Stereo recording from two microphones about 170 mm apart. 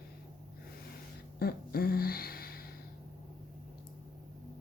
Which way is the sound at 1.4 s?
65° left (ahead or behind).